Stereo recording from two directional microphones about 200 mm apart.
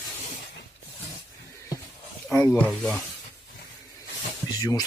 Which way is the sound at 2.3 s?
10° left (ahead or behind).